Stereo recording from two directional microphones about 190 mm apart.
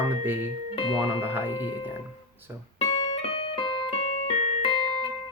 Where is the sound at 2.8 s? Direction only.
30° left (ahead or behind).